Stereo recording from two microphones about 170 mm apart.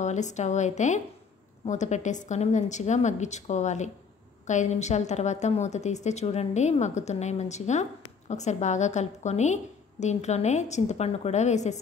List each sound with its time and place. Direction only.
0.0 s a woman's voice: 45° left (ahead or behind)